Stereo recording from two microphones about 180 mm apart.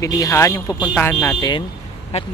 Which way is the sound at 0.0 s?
20° left (ahead or behind).